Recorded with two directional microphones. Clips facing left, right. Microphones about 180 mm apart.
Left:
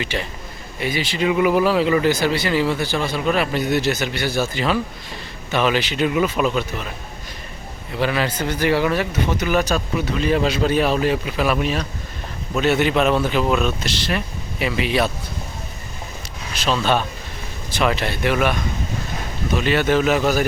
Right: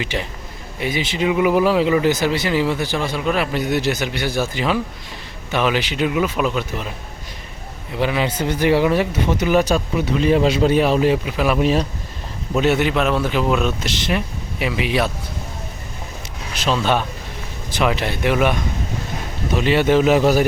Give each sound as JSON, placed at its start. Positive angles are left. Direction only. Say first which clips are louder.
{"t": 0.0, "sound": "speech", "louder": "right 1 dB", "side_deg": -15}
{"t": 7.9, "sound": "speech", "louder": "right 1 dB", "side_deg": -20}
{"t": 11.6, "sound": "speech", "louder": "right 5 dB", "side_deg": -35}
{"t": 12.5, "sound": "speech", "louder": "right 1 dB", "side_deg": -15}
{"t": 12.9, "sound": "speech", "louder": "left 1 dB", "side_deg": 0}
{"t": 16.6, "sound": "speech", "louder": "right 1 dB", "side_deg": -15}
{"t": 19.5, "sound": "speech", "louder": "right 3 dB", "side_deg": -25}